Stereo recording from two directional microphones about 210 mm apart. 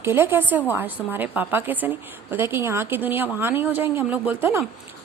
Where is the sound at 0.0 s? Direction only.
10° right (ahead or behind).